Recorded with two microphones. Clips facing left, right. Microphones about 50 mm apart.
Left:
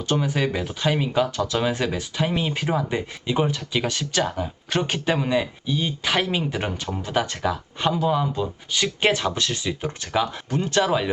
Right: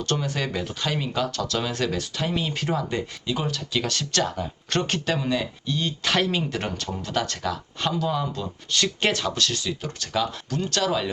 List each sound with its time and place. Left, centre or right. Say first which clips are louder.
0.0 s speech: left 4 dB; centre